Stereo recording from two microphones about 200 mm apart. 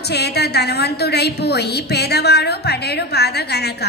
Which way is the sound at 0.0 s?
55° left (ahead or behind).